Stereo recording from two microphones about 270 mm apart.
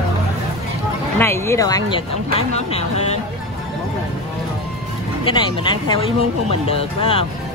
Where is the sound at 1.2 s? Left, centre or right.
Centre.